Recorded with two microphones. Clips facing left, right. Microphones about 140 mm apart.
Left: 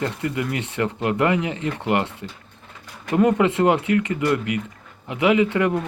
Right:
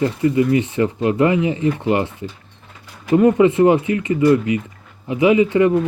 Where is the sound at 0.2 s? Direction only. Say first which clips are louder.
Right 10 dB; 70° left (ahead or behind).